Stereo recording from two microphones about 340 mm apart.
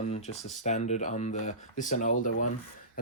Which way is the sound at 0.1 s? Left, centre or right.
Centre.